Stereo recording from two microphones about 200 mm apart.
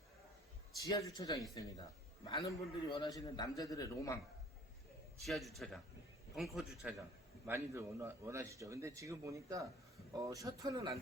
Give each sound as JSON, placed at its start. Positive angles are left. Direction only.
{"t": 0.8, "sound": "a man's voice", "side_deg": 20}
{"t": 5.2, "sound": "speech", "side_deg": 0}
{"t": 7.4, "sound": "a man's voice", "side_deg": -10}